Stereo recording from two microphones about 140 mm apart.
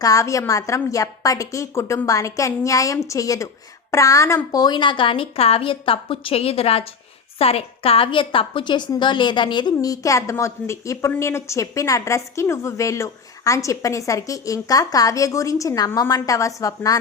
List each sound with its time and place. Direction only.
0.0 s a woman's voice: 25° left (ahead or behind)